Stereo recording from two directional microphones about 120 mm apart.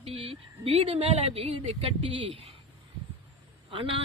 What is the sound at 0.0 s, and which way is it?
A woman's voice, 55° right (ahead or behind).